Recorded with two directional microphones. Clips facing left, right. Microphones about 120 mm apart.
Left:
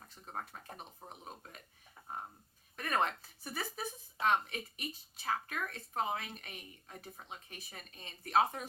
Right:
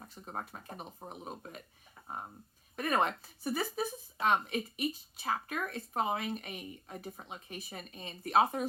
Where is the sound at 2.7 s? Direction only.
15° right (ahead or behind).